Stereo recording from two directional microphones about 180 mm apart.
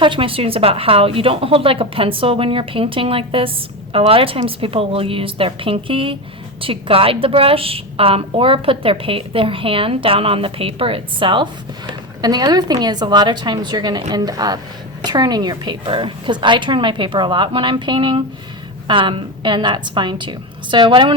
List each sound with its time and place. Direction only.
0.0 s a woman's voice: 30° right (ahead or behind)